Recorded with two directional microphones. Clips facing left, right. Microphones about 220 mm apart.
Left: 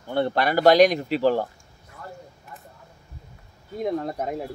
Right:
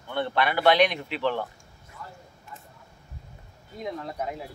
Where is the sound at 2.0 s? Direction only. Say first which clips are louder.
Left 4 dB; 50° left (ahead or behind).